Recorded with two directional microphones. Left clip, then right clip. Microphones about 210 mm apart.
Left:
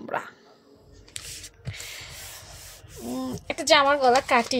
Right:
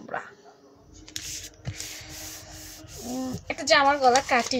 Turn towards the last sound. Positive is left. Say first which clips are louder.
# left 1 dB
turn(degrees=40)  # may be behind; listen again after turning